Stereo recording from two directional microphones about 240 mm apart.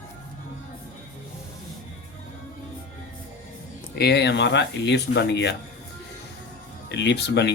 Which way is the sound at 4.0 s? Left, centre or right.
Left.